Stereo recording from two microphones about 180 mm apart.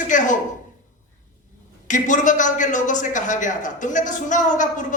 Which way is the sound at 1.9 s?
45° left (ahead or behind).